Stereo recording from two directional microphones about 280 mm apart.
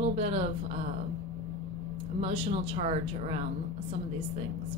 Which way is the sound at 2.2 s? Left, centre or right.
Right.